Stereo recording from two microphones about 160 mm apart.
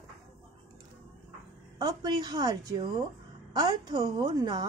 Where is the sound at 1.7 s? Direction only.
25° right (ahead or behind).